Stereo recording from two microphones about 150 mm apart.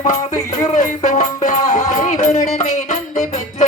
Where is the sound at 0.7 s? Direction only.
50° left (ahead or behind).